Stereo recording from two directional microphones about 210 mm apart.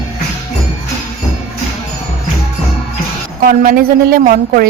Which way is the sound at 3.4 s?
45° right (ahead or behind).